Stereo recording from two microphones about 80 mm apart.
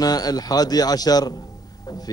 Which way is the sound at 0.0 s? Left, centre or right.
Left.